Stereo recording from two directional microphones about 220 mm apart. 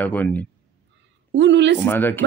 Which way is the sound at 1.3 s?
55° right (ahead or behind).